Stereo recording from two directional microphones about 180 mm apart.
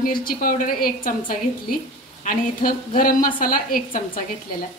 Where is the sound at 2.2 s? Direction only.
50° left (ahead or behind).